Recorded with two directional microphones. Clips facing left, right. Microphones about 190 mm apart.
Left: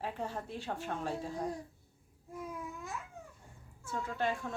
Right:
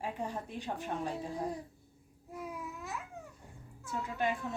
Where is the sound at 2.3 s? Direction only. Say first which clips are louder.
Even; 5° right (ahead or behind).